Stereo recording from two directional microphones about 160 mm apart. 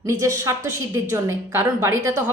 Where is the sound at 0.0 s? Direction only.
20° right (ahead or behind).